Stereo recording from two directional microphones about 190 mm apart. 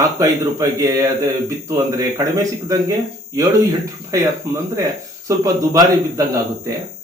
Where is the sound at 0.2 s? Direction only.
15° right (ahead or behind).